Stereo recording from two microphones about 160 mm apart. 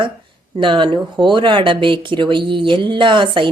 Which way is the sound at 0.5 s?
30° right (ahead or behind).